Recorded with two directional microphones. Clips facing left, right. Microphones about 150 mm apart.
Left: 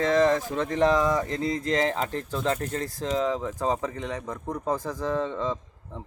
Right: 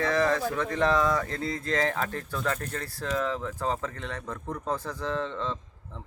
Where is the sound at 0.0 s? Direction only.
20° left (ahead or behind).